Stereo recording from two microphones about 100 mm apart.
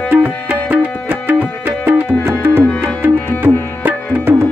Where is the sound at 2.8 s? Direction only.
20° right (ahead or behind).